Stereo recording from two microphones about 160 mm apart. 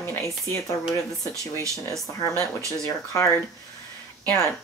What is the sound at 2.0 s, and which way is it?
Speech, 20° left (ahead or behind).